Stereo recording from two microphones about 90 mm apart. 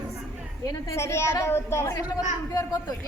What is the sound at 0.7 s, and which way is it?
A woman's voice, 30° left (ahead or behind).